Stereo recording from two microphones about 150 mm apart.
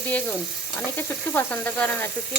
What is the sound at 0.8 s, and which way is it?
Stir, 15° left (ahead or behind).